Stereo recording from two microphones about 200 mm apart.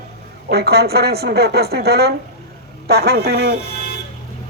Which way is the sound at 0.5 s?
55° right (ahead or behind).